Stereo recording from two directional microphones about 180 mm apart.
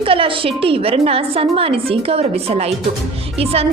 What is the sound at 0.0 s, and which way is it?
A woman's voice, 30° right (ahead or behind).